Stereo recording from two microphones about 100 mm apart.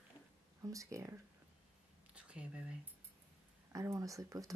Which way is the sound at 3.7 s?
30° right (ahead or behind).